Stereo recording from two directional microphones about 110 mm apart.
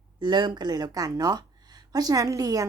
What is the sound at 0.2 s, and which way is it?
Speech, 45° right (ahead or behind).